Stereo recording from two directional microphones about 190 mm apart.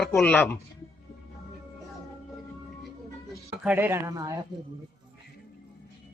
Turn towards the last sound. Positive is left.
turn(degrees=-20)  # may be behind; listen again after turning